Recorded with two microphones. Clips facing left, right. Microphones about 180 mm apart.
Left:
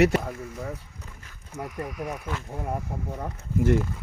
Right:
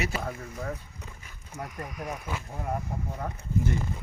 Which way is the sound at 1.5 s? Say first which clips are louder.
Left 4 dB; 5° left (ahead or behind).